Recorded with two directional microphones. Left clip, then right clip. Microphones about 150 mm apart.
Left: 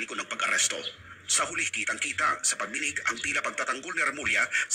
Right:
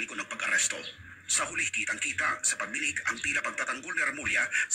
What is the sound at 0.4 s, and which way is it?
Speech, 30° left (ahead or behind).